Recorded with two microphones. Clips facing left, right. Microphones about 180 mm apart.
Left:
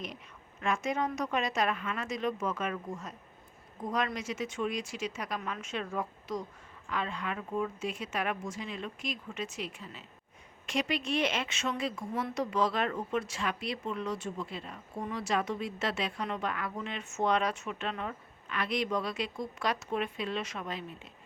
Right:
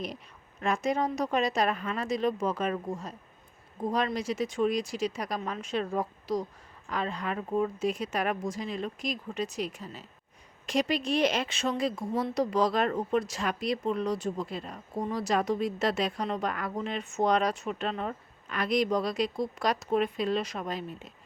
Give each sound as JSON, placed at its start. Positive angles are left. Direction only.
{"t": 0.6, "sound": "speech", "side_deg": -35}